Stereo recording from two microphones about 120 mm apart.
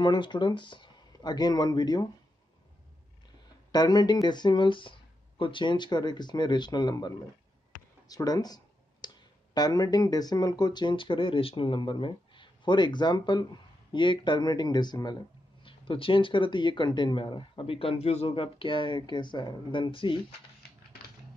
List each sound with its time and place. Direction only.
0.0 s speech: 40° left (ahead or behind)
3.7 s speech: 35° left (ahead or behind)